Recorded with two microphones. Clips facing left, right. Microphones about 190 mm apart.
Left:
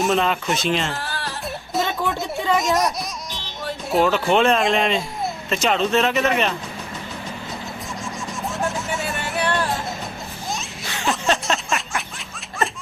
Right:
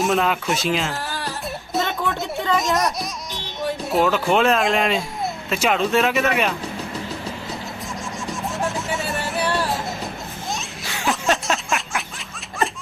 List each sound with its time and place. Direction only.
0.0 s speech: centre (ahead or behind)
2.0 s a sound: 15° left (ahead or behind)
2.6 s speech: centre (ahead or behind)
3.9 s speech: 5° right (ahead or behind)
8.3 s music: centre (ahead or behind)
10.8 s a sound: centre (ahead or behind)